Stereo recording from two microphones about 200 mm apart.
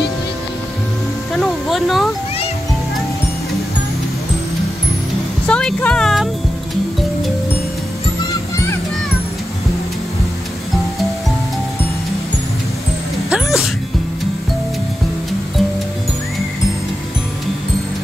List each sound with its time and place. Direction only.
1.3 s a sound: centre (ahead or behind)
5.5 s music: 5° left (ahead or behind)
13.3 s music: centre (ahead or behind)